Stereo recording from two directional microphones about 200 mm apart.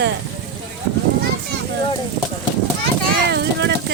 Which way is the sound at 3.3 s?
60° right (ahead or behind).